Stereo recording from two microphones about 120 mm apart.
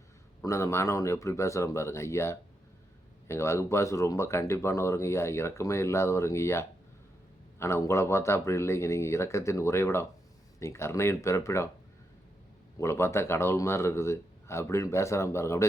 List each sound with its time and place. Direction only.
0.4 s speech: 25° left (ahead or behind)
12.8 s speech: 20° left (ahead or behind)